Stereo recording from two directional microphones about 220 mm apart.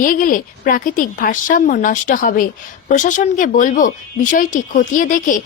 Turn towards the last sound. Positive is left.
turn(degrees=35)  # may be behind; listen again after turning